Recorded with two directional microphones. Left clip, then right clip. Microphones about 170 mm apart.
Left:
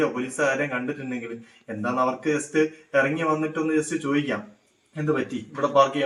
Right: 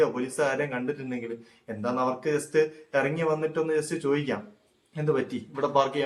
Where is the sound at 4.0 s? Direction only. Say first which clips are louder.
Left 2 dB; 20° right (ahead or behind).